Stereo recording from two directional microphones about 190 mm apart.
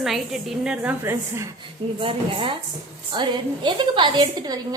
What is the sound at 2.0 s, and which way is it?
A woman's voice, 30° right (ahead or behind).